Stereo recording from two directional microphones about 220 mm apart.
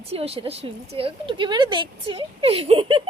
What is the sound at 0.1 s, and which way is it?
A woman's voice, 25° right (ahead or behind).